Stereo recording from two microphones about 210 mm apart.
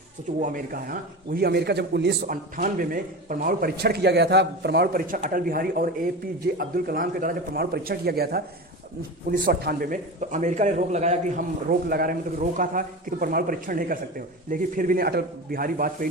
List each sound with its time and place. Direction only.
0.3 s speech: 40° right (ahead or behind)
2.2 s a man's voice: 40° right (ahead or behind)